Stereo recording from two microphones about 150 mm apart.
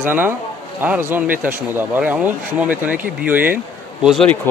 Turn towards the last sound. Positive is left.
turn(degrees=0)  # may be behind; listen again after turning